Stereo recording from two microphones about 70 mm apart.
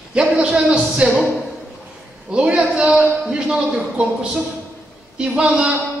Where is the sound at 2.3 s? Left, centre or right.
Centre.